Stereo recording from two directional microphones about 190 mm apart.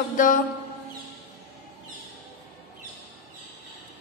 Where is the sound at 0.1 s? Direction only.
45° left (ahead or behind).